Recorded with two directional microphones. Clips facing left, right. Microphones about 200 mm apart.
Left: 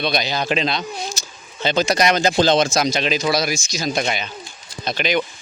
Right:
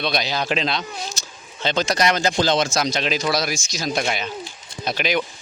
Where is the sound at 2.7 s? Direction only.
5° left (ahead or behind).